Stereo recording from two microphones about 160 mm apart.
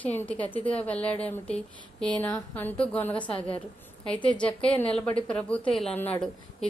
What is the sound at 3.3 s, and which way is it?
Speech, 35° left (ahead or behind).